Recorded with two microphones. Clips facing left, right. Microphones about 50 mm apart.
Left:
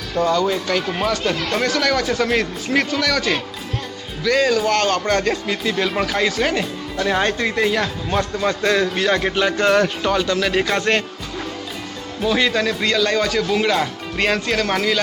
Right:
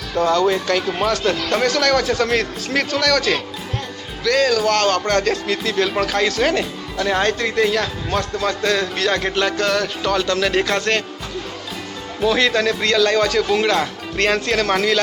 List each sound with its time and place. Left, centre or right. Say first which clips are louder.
0.2 s speech: right 2 dB; centre
9.6 s music: left 4 dB; centre
10.1 s speech: even; centre
12.2 s speech: right 2 dB; centre